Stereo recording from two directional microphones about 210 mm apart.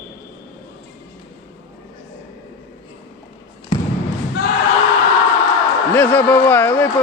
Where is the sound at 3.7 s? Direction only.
25° left (ahead or behind).